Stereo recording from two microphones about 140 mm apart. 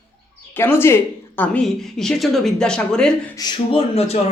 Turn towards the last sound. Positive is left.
turn(degrees=45)  # may be behind; listen again after turning